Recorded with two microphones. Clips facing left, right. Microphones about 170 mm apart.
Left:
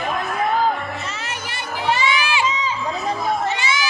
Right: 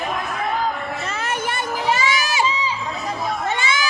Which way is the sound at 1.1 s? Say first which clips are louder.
Right 6 dB; 50° right (ahead or behind).